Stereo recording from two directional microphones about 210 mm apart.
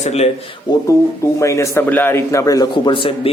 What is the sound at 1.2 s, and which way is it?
A man's voice, 15° left (ahead or behind).